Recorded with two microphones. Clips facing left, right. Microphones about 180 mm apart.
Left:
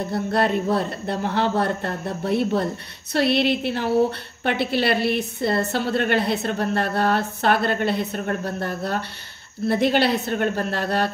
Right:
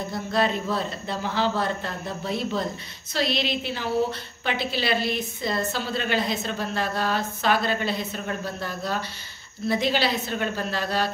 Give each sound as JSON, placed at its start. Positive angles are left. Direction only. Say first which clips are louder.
{"t": 0.1, "sound": "a woman's voice", "louder": "left 3 dB", "side_deg": 65}